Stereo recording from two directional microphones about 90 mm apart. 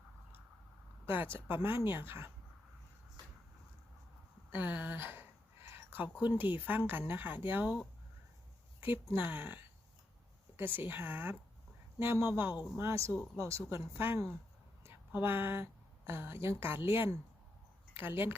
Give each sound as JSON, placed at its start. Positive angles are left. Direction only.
{"t": 1.0, "sound": "speech", "side_deg": -25}
{"t": 4.5, "sound": "speech", "side_deg": -20}
{"t": 9.1, "sound": "speech", "side_deg": -20}
{"t": 10.6, "sound": "a woman's voice", "side_deg": -20}